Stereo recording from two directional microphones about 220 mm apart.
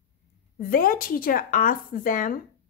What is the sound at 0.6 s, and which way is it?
A woman's voice, 40° left (ahead or behind).